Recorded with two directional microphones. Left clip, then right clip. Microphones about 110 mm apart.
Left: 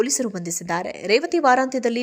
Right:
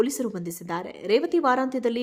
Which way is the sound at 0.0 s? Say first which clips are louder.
Left 3 dB; 20° left (ahead or behind).